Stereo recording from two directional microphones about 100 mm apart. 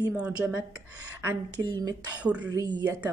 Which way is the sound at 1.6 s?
40° right (ahead or behind).